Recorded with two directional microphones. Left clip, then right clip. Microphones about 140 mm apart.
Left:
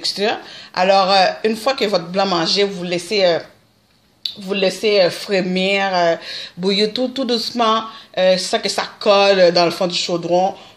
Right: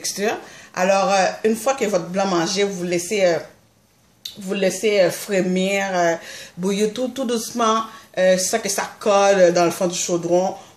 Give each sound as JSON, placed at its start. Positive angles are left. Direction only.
{"t": 0.0, "sound": "speech", "side_deg": 15}
{"t": 4.5, "sound": "speech", "side_deg": 20}